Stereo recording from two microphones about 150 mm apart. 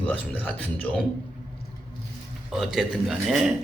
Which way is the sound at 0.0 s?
10° left (ahead or behind).